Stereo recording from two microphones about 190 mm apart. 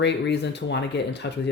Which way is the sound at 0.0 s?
65° left (ahead or behind).